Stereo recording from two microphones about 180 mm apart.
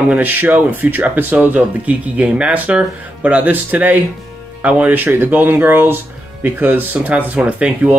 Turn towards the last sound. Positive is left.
turn(degrees=-5)  # may be behind; listen again after turning